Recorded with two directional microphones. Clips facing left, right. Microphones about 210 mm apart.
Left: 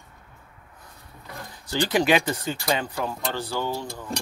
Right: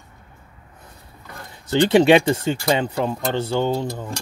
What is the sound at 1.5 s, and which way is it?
Speech, 25° right (ahead or behind).